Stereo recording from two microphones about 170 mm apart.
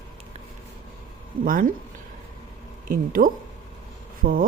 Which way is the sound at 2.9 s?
55° right (ahead or behind).